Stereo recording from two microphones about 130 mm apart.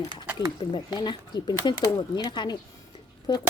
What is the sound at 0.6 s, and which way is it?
Speech, 35° left (ahead or behind).